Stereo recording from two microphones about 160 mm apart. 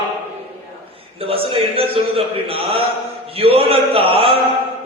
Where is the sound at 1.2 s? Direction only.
35° right (ahead or behind).